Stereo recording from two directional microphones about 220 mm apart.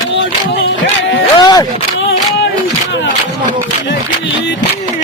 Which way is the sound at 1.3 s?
20° left (ahead or behind).